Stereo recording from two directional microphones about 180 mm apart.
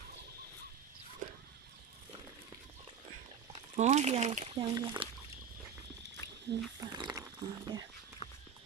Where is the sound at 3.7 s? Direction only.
40° right (ahead or behind).